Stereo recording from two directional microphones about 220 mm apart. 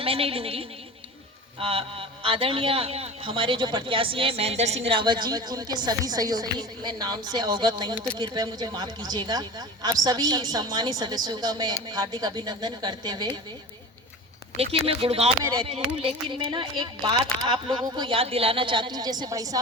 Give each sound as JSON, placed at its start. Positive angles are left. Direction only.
{"t": 0.0, "sound": "a man's voice", "side_deg": -25}
{"t": 14.5, "sound": "a man's voice", "side_deg": -25}
{"t": 15.4, "sound": "a man's voice", "side_deg": -15}